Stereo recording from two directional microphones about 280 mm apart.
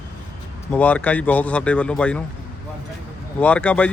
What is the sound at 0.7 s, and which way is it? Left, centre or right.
Speech, centre.